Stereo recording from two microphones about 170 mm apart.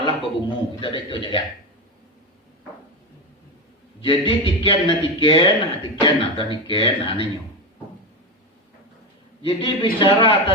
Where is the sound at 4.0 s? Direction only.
30° left (ahead or behind).